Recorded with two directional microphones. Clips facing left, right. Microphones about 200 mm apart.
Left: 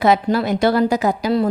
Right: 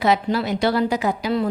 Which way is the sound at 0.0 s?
50° left (ahead or behind).